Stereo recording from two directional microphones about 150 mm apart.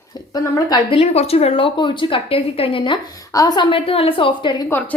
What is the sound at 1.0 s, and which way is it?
A woman's voice, 40° left (ahead or behind).